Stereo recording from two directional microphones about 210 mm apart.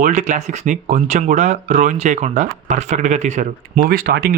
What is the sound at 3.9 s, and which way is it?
Speech, 45° right (ahead or behind).